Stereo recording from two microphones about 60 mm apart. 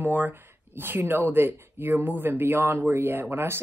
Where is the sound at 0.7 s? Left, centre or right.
Right.